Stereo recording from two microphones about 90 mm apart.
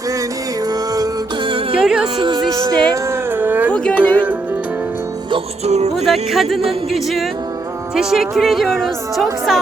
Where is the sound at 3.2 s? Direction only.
20° right (ahead or behind).